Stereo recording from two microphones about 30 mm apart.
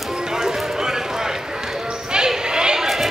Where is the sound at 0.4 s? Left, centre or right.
Centre.